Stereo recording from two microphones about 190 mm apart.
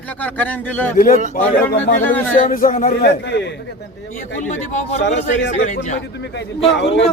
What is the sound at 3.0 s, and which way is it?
Speech, 65° left (ahead or behind).